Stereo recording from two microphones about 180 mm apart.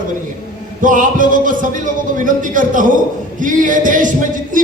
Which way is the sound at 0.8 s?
50° right (ahead or behind).